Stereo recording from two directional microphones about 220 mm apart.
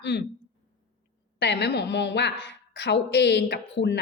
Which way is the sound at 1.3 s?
50° left (ahead or behind).